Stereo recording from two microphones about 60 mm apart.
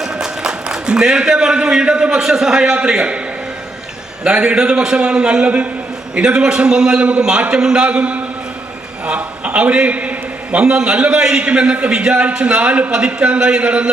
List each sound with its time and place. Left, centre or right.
0.0 s a man's voice: centre
4.2 s a man's voice: centre